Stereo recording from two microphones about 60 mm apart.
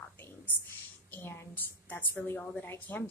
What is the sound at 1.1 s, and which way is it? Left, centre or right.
A woman's voice, left.